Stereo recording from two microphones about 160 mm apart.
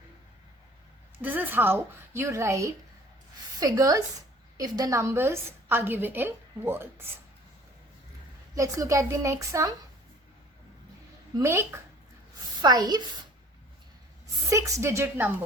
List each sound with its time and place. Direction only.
1.2 s a woman's voice: 10° right (ahead or behind)
8.5 s a woman's voice: 20° right (ahead or behind)
11.3 s a woman's voice: 15° right (ahead or behind)
14.5 s a woman's voice: 20° right (ahead or behind)